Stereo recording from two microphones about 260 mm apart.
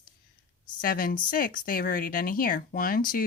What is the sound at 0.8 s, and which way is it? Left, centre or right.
A woman's voice, left.